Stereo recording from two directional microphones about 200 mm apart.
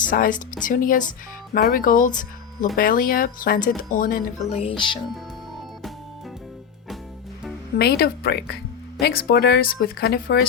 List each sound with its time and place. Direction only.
0.0 s speech: 40° left (ahead or behind)
7.8 s speech: 50° left (ahead or behind)